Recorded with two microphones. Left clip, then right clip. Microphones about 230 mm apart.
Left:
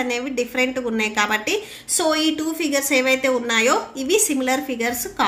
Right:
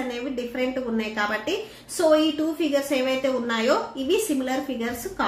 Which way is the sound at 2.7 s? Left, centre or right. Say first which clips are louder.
Left 8 dB; left.